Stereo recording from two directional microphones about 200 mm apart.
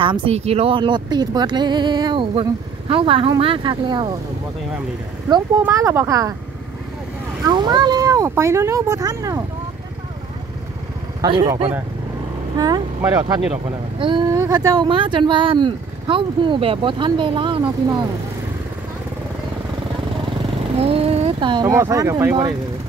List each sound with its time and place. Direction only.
0.0 s speech: 25° right (ahead or behind)
5.6 s speech: 15° right (ahead or behind)
7.4 s speech: 20° right (ahead or behind)
11.1 s speech: 25° right (ahead or behind)
20.7 s speech: 30° right (ahead or behind)